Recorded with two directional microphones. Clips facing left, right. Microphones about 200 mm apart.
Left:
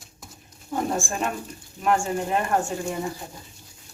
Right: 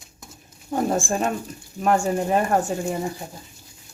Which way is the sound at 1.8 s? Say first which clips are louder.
Right 3 dB; 40° right (ahead or behind).